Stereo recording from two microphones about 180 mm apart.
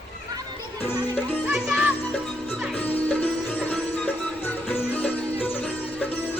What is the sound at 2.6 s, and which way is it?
Music, 10° left (ahead or behind).